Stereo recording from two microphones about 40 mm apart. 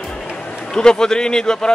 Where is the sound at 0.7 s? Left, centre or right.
Centre.